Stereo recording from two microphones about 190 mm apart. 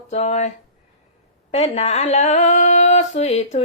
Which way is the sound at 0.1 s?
35° left (ahead or behind).